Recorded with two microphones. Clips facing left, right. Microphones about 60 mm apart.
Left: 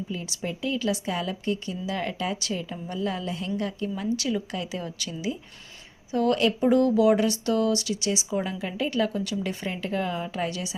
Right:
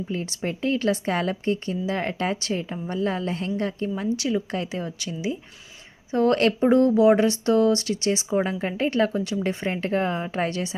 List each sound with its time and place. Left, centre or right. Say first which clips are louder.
0.1 s a woman's voice: right 4 dB; right